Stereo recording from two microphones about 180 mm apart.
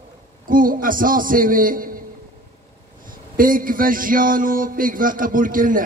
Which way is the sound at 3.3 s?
50° right (ahead or behind).